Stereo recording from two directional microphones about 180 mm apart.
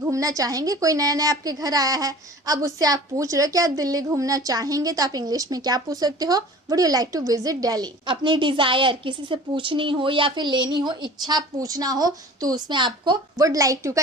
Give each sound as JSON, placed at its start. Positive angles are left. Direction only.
{"t": 0.0, "sound": "a woman's voice", "side_deg": -20}